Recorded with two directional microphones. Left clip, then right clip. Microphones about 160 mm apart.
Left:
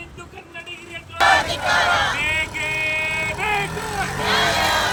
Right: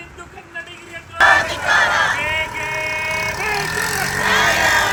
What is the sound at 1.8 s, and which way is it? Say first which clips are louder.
Music: right 2 dB; 90° left.